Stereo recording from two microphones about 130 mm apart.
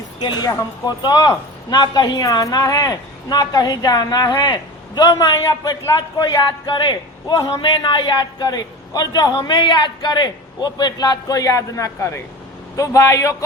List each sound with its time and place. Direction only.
0.2 s a man's voice: 35° left (ahead or behind)